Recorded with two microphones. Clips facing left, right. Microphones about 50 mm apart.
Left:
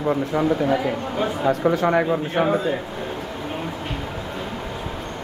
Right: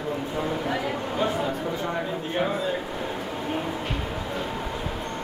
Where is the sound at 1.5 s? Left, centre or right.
Left.